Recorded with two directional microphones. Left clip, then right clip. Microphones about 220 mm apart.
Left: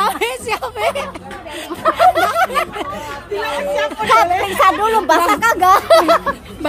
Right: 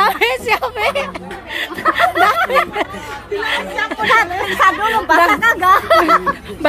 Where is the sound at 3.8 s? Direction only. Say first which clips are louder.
Left 1 dB; 45° left (ahead or behind).